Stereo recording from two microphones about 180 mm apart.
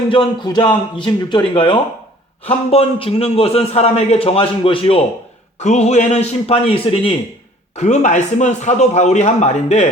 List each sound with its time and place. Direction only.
0.1 s a man's voice: 25° left (ahead or behind)